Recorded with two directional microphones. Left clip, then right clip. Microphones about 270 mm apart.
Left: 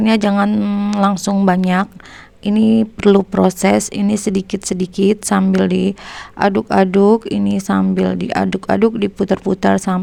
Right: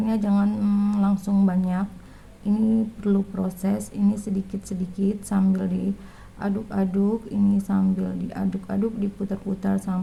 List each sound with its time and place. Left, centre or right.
0.0 s speech: left